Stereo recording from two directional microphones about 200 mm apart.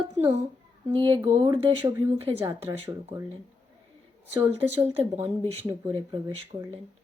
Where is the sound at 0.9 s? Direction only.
25° right (ahead or behind).